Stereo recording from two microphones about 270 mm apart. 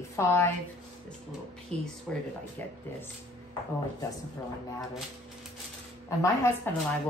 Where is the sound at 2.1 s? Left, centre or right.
Centre.